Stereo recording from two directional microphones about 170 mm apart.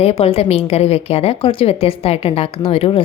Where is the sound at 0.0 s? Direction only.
35° left (ahead or behind).